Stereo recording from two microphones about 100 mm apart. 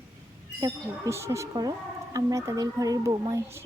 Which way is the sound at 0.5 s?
30° right (ahead or behind).